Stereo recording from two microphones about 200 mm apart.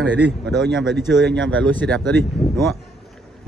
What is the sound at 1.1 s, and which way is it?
Speech, 70° right (ahead or behind).